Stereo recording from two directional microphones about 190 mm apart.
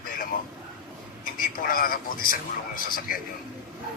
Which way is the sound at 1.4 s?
50° left (ahead or behind).